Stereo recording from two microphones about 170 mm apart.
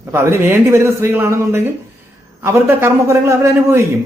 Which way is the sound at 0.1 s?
15° right (ahead or behind).